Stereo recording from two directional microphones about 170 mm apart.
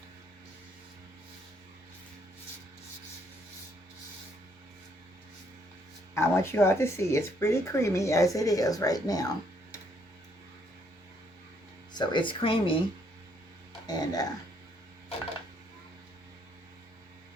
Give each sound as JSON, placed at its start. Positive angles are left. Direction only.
{"t": 6.1, "sound": "speech", "side_deg": 15}
{"t": 11.9, "sound": "speech", "side_deg": 30}
{"t": 13.8, "sound": "speech", "side_deg": 25}